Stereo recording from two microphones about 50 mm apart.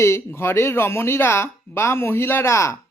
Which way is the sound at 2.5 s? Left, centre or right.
Left.